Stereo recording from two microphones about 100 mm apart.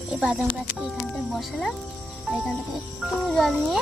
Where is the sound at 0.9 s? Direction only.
Centre (ahead or behind).